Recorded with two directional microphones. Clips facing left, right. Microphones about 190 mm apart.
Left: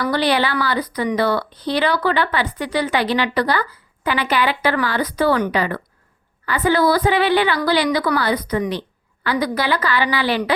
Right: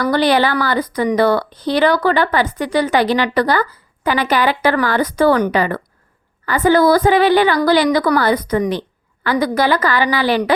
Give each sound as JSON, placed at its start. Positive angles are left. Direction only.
{"t": 0.0, "sound": "a woman's voice", "side_deg": -45}